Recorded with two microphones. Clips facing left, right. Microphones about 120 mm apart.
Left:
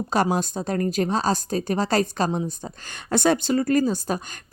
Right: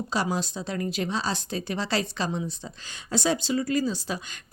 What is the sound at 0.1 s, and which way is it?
Speech, 50° left (ahead or behind).